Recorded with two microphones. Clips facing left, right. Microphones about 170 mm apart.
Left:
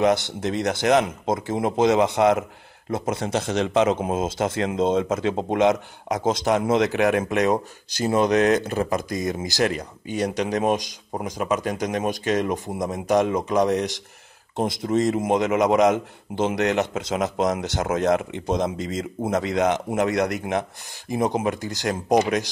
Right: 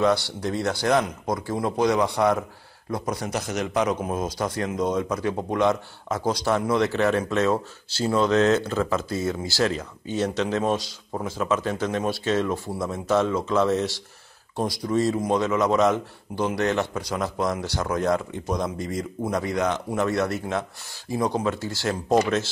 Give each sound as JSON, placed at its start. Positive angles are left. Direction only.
{"t": 0.0, "sound": "a man's voice", "side_deg": 20}